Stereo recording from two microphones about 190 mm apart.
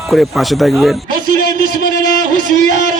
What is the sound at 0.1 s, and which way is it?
Speech, centre (ahead or behind).